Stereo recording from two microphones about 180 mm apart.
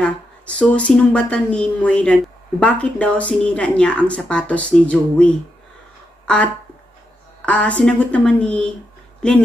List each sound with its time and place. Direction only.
0.0 s a woman's voice: 5° left (ahead or behind)